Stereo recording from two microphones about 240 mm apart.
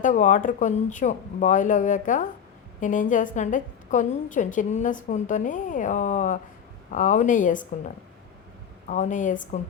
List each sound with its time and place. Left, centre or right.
0.0 s a woman's voice: left
8.9 s a woman's voice: left